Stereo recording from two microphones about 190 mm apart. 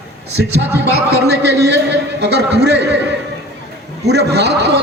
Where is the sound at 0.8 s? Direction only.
60° right (ahead or behind).